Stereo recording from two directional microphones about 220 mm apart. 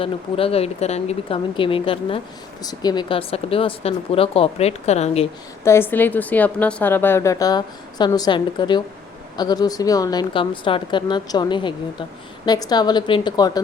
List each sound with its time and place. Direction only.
0.0 s speech: 25° left (ahead or behind)
5.6 s a woman's voice: 10° left (ahead or behind)